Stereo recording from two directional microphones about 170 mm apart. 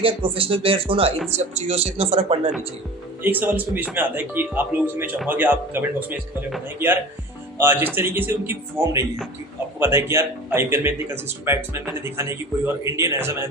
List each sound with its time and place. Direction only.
0.0 s speech: 30° right (ahead or behind)
3.2 s speech: 10° right (ahead or behind)